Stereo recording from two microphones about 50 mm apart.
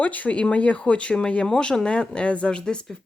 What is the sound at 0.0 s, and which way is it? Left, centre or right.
Speech, left.